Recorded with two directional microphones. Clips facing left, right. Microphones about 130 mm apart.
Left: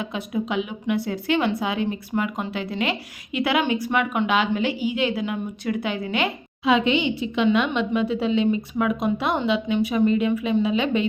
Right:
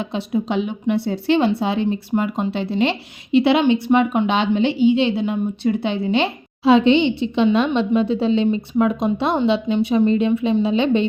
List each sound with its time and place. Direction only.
0.1 s a woman's voice: 30° right (ahead or behind)